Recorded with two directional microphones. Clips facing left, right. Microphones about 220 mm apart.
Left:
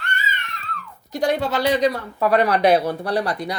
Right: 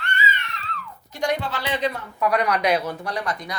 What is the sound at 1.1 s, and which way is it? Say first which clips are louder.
Speech: left 5 dB; 35° left (ahead or behind).